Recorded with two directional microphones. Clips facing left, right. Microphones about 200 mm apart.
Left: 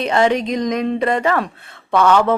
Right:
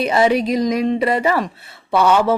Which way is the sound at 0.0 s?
5° right (ahead or behind).